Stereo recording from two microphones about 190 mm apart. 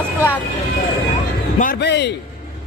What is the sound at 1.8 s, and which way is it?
Speech, 65° left (ahead or behind).